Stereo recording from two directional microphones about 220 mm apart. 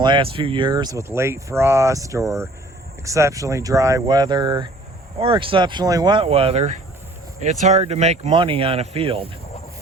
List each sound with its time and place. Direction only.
0.0 s speech: 20° right (ahead or behind)